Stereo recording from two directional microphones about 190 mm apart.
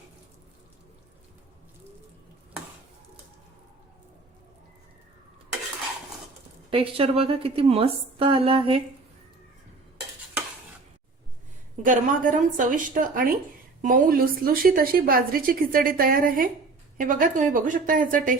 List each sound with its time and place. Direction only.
6.7 s a woman's voice: 30° right (ahead or behind)
11.8 s a woman's voice: 45° right (ahead or behind)